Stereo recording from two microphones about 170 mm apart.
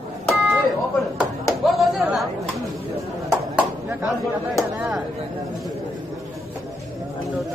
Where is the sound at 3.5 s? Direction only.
5° right (ahead or behind).